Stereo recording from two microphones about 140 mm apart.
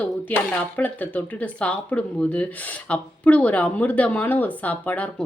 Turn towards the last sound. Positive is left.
turn(degrees=10)  # may be behind; listen again after turning